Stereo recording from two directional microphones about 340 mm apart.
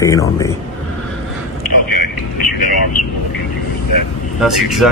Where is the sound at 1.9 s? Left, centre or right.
Left.